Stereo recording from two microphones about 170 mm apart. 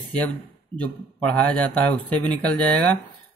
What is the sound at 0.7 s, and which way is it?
A man's voice, 5° left (ahead or behind).